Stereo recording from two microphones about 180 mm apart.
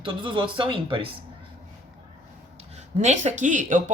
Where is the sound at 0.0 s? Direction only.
25° right (ahead or behind).